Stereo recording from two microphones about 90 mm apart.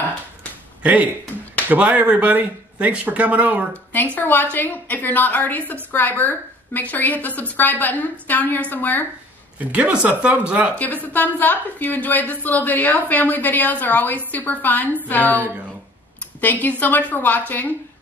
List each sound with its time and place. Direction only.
1.7 s speech: 15° right (ahead or behind)
3.9 s a woman's voice: 20° left (ahead or behind)
9.6 s speech: 15° right (ahead or behind)
10.8 s a woman's voice: 20° left (ahead or behind)